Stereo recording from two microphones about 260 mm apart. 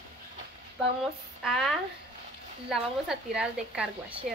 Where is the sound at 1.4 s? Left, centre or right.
Centre.